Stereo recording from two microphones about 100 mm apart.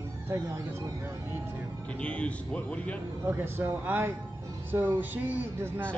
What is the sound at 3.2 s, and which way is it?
Speech, 20° right (ahead or behind).